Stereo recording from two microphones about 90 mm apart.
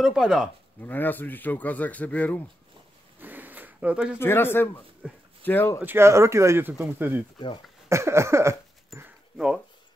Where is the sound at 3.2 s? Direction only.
20° right (ahead or behind).